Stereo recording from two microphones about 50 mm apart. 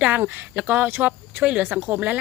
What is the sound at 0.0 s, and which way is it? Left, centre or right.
Speech, right.